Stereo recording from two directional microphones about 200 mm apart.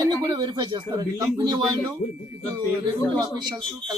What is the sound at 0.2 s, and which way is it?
Speech, 20° right (ahead or behind).